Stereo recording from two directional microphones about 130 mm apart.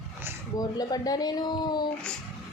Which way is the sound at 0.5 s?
30° left (ahead or behind).